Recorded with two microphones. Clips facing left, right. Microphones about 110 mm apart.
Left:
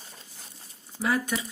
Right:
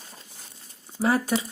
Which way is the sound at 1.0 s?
30° right (ahead or behind).